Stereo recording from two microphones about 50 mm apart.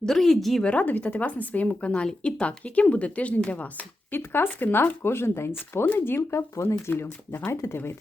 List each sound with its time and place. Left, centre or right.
0.0 s speech: centre
0.6 s speech: left
1.9 s speech: left
4.2 s speech: left